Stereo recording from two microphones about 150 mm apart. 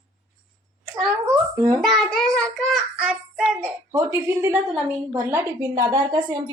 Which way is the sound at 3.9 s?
15° right (ahead or behind).